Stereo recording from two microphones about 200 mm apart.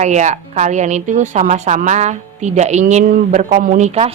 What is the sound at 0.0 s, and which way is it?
A woman's voice, 35° right (ahead or behind).